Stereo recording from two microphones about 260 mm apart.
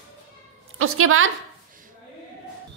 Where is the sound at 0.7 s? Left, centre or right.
Right.